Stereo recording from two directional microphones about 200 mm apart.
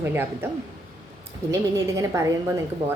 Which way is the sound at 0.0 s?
10° right (ahead or behind).